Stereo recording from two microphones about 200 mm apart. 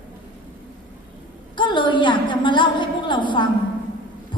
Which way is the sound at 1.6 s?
25° left (ahead or behind).